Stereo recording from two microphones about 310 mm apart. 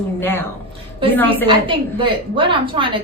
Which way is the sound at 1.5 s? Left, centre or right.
Centre.